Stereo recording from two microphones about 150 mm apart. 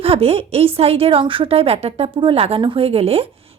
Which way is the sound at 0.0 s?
40° right (ahead or behind).